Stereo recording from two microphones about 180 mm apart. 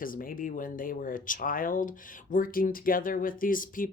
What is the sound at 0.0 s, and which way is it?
Speech, 50° left (ahead or behind).